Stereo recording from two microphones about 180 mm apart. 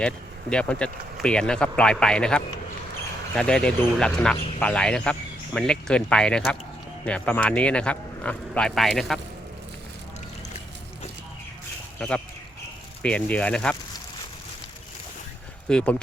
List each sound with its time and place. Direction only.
0.5 s speech: 5° left (ahead or behind)
4.4 s a sound: 30° left (ahead or behind)
4.6 s speech: 5° left (ahead or behind)
11.9 s speech: 5° left (ahead or behind)
15.7 s speech: 5° left (ahead or behind)